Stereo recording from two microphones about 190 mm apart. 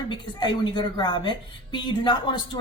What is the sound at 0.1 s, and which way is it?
A woman's voice, 25° left (ahead or behind).